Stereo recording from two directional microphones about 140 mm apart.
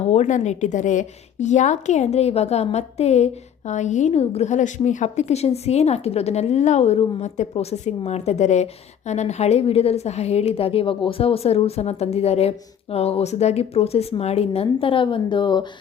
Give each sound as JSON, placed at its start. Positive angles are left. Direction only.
{"t": 0.1, "sound": "a woman's voice", "side_deg": 60}